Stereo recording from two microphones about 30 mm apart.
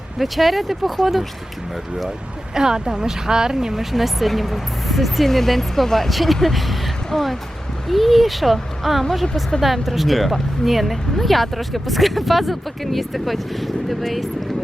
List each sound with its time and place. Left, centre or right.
0.2 s speech: centre
2.6 s speech: right
3.9 s speech: centre